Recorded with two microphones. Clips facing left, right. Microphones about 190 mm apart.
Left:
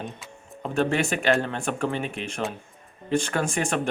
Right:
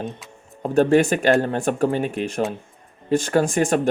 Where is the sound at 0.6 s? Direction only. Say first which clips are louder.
Right 8 dB; 40° right (ahead or behind).